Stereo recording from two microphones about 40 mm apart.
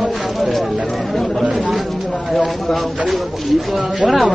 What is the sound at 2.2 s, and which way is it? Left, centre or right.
Speech, centre.